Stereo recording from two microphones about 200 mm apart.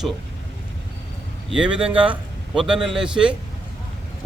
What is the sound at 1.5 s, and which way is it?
A man's voice, 5° right (ahead or behind).